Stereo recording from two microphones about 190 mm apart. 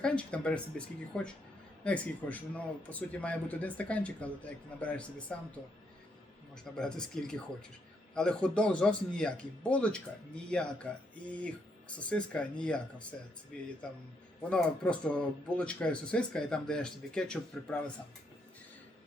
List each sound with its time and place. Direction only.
0.0 s speech: 5° left (ahead or behind)
6.7 s speech: 5° left (ahead or behind)